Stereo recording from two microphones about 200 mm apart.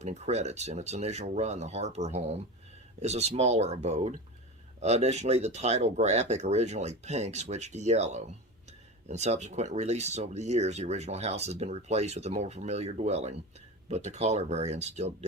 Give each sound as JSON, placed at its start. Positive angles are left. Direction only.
{"t": 0.0, "sound": "speech", "side_deg": -35}